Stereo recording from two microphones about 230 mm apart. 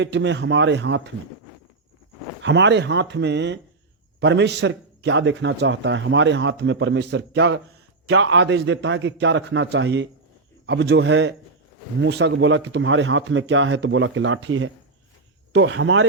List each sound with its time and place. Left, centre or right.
0.0 s a man's voice: right
2.4 s a man's voice: right